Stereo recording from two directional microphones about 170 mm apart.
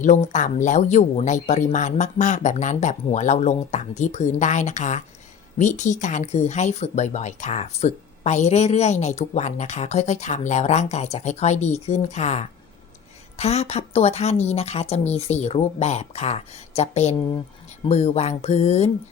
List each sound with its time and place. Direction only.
0.0 s a woman's voice: 45° left (ahead or behind)